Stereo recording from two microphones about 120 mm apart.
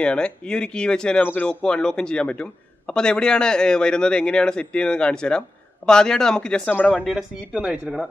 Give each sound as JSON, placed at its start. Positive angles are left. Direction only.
{"t": 0.0, "sound": "speech", "side_deg": 10}
{"t": 7.1, "sound": "speech", "side_deg": -5}